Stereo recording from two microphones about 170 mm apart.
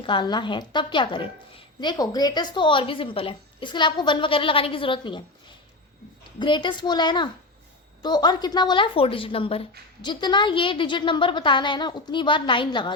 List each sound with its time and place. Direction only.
0.0 s a woman's voice: 30° left (ahead or behind)
6.4 s a woman's voice: 30° left (ahead or behind)